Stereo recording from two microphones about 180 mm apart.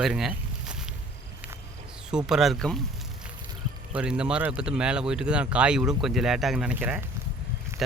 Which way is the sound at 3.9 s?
5° right (ahead or behind).